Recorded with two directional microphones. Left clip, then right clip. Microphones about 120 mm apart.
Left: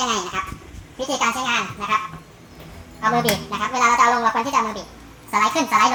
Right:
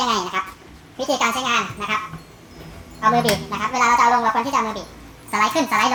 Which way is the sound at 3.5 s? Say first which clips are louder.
Even; 5° right (ahead or behind).